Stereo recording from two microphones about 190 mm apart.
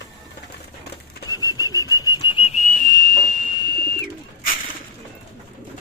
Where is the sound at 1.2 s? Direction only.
20° left (ahead or behind); by 3.1 s 50° left (ahead or behind).